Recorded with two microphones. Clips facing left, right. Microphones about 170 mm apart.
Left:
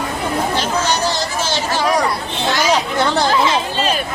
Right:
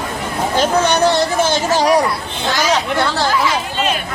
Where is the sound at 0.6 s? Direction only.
60° right (ahead or behind).